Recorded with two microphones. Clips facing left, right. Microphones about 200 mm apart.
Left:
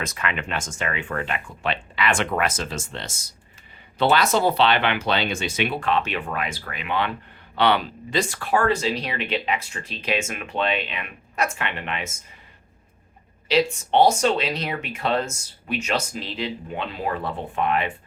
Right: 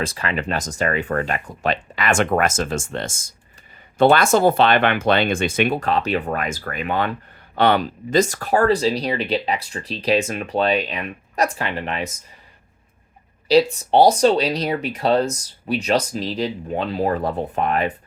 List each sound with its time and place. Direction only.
0.0 s speech: 30° right (ahead or behind)
13.5 s speech: 35° right (ahead or behind)